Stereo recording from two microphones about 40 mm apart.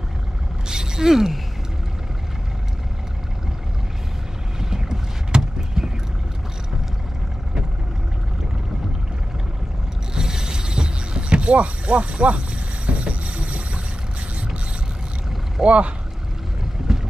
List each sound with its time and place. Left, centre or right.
0.7 s a sound: centre
4.6 s boat: centre
10.1 s vehicle: centre
15.6 s speech: right